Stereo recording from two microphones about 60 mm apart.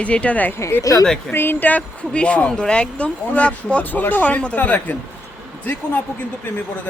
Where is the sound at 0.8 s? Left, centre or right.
Left.